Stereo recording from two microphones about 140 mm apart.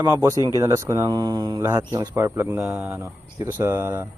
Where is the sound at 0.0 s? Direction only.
20° right (ahead or behind).